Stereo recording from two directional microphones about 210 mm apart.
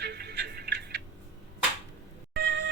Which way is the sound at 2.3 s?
50° right (ahead or behind).